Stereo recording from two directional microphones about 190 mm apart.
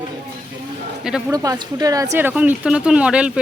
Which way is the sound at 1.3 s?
15° right (ahead or behind).